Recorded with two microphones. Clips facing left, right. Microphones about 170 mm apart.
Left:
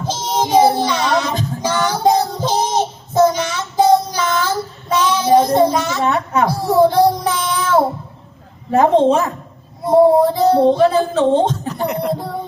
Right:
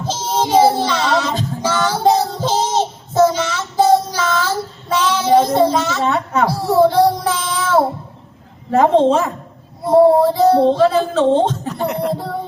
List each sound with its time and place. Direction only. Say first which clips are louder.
0.0 s music: even; 10° left (ahead or behind)
8.7 s a woman's voice: even; 15° left (ahead or behind)
9.9 s female singing: even; 15° left (ahead or behind)